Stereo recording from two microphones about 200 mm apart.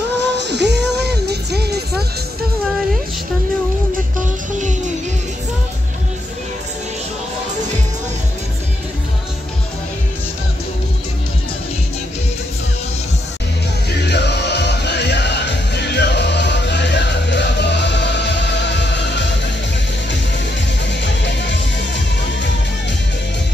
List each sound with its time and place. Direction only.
0.2 s music: 60° right (ahead or behind)
13.8 s music: 55° left (ahead or behind)
21.0 s music: 60° left (ahead or behind)